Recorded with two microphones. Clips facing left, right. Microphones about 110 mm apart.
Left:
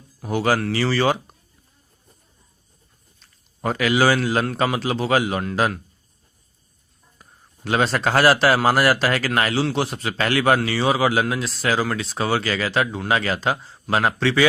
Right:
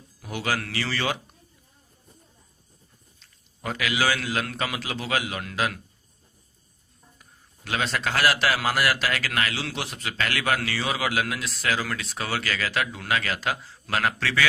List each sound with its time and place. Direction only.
0.2 s a man's voice: 35° left (ahead or behind)
3.2 s a man's voice: 40° left (ahead or behind)
7.2 s a man's voice: 35° left (ahead or behind)